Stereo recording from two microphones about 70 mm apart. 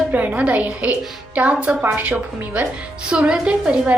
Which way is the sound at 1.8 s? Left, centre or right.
Right.